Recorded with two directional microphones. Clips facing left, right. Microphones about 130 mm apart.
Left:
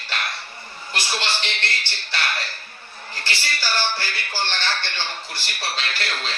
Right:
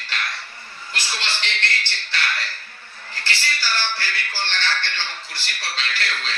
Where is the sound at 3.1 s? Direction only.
15° left (ahead or behind).